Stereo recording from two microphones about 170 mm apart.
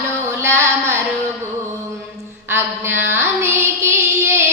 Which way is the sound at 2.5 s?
15° right (ahead or behind).